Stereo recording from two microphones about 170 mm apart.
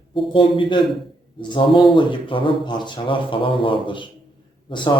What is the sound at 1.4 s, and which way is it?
Mantra, 25° left (ahead or behind).